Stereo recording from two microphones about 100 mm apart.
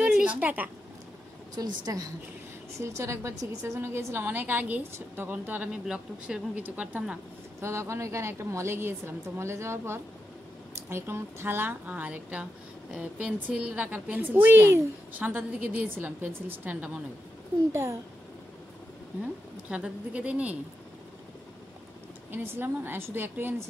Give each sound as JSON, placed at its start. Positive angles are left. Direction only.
{"t": 0.0, "sound": "a sound", "side_deg": -10}
{"t": 1.5, "sound": "a woman's voice", "side_deg": -40}
{"t": 7.6, "sound": "a woman's voice", "side_deg": -25}
{"t": 19.2, "sound": "a woman's voice", "side_deg": -10}
{"t": 22.3, "sound": "a woman's voice", "side_deg": -20}